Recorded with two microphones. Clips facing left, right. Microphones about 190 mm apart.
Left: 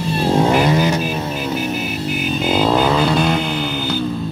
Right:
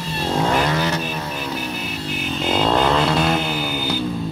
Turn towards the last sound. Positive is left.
turn(degrees=0)  # may be behind; listen again after turning